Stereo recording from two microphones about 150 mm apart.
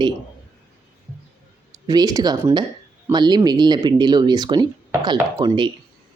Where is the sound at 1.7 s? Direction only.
25° right (ahead or behind).